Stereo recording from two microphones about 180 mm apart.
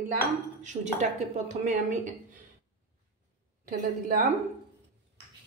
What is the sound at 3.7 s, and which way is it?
Speech, 50° right (ahead or behind).